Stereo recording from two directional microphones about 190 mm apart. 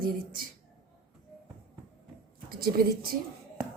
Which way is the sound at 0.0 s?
50° right (ahead or behind).